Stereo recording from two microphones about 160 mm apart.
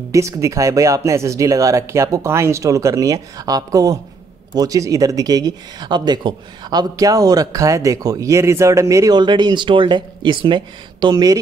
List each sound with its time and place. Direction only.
0.1 s speech: 20° right (ahead or behind)